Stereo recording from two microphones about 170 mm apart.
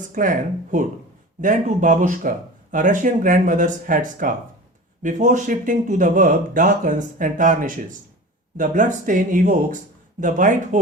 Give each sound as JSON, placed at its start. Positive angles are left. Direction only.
{"t": 0.0, "sound": "speech", "side_deg": -50}